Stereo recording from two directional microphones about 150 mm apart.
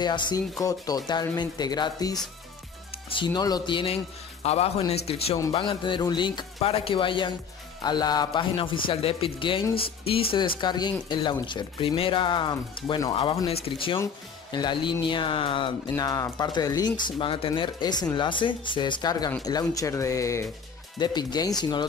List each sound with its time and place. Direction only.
0.0 s speech: 30° left (ahead or behind)
17.2 s speech: 35° left (ahead or behind)